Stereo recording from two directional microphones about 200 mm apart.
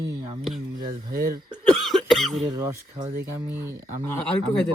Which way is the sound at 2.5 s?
15° right (ahead or behind).